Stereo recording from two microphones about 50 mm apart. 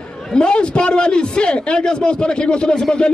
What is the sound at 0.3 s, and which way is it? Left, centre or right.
A man's voice, centre.